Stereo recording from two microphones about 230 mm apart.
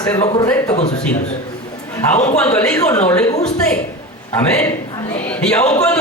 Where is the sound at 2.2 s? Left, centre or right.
Centre.